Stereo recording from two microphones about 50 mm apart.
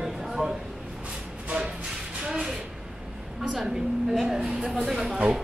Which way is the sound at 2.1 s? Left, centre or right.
Centre.